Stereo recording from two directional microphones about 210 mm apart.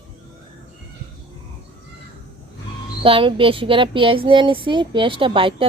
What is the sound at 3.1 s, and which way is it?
Speech, 25° right (ahead or behind).